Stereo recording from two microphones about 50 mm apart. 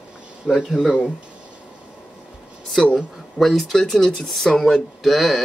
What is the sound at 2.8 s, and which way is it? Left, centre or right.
Speech, left.